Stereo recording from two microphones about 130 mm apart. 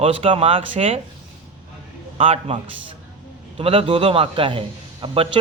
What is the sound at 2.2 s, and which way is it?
A man's voice, 50° right (ahead or behind).